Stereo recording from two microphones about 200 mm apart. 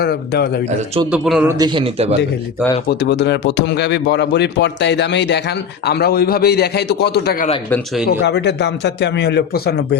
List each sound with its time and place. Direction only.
0.0 s a man's voice: 50° left (ahead or behind)
1.1 s a man's voice: 5° right (ahead or behind)
1.5 s a man's voice: 20° right (ahead or behind)
2.9 s a man's voice: 60° left (ahead or behind)